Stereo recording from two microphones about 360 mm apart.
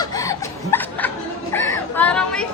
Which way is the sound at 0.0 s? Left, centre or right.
Centre.